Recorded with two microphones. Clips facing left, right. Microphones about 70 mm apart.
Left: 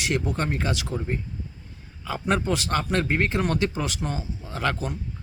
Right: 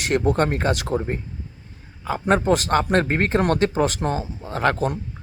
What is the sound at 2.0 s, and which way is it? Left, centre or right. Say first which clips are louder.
A man's voice: right 5 dB; right.